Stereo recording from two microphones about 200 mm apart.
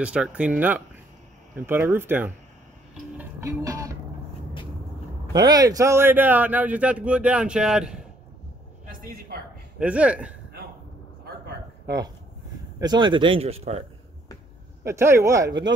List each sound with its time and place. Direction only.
0.0 s speech: 5° right (ahead or behind)
3.2 s music: 15° right (ahead or behind)
5.3 s speech: 20° right (ahead or behind); by 8.1 s 5° right (ahead or behind)
9.8 s speech: 5° right (ahead or behind)
12.8 s speech: 20° right (ahead or behind)
14.9 s speech: 15° right (ahead or behind)